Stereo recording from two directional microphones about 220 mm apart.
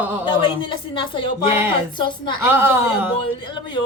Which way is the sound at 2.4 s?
10° right (ahead or behind).